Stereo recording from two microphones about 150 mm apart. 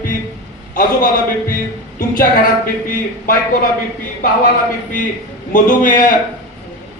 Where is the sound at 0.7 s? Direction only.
65° left (ahead or behind).